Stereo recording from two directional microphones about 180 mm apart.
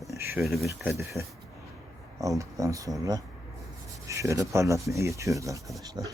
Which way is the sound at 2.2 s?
15° right (ahead or behind).